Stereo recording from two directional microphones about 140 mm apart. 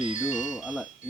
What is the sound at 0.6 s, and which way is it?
Speech, 5° right (ahead or behind).